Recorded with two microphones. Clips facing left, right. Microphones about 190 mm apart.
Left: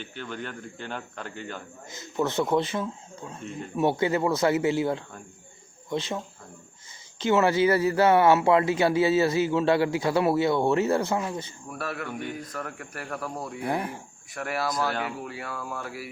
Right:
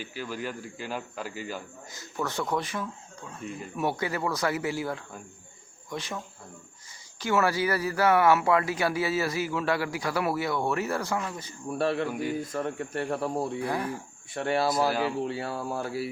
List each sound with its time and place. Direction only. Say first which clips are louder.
0.0 s speech: right 1 dB; 5° right (ahead or behind)
1.9 s speech: left 6 dB; 20° left (ahead or behind)
7.2 s speech: left 4 dB; 20° left (ahead or behind)
11.7 s speech: right 6 dB; 30° right (ahead or behind)
13.6 s speech: left 1 dB; 25° left (ahead or behind)
14.3 s speech: right 3 dB; 30° right (ahead or behind)